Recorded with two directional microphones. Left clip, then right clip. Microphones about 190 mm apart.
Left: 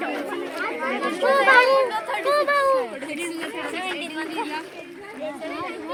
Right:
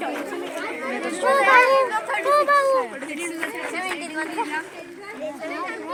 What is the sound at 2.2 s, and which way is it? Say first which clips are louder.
Chatter: right 2 dB; 50° left (ahead or behind).